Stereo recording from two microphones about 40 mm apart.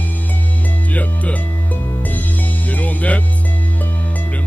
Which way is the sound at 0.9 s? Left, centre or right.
Left.